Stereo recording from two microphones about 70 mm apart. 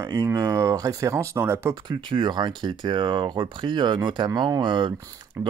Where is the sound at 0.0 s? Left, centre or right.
Right.